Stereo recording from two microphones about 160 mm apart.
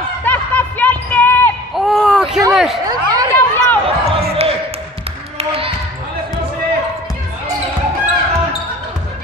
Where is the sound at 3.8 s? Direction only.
35° right (ahead or behind).